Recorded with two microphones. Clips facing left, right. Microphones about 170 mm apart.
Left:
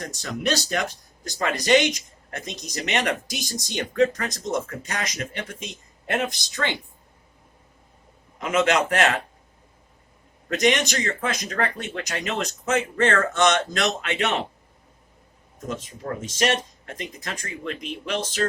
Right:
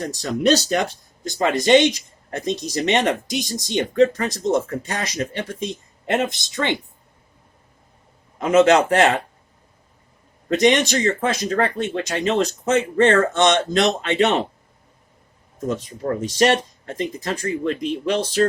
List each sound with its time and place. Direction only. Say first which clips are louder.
0.0 s speech: right 8 dB; 35° right (ahead or behind)
8.4 s speech: right 7 dB; 35° right (ahead or behind)
10.5 s speech: right 5 dB; 25° right (ahead or behind)
15.6 s speech: right 7 dB; 35° right (ahead or behind)